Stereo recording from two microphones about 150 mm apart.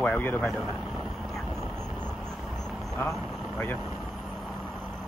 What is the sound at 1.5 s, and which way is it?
Vehicle, 15° right (ahead or behind).